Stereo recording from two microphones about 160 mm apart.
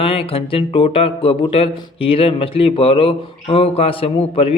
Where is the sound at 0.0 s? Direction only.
35° left (ahead or behind).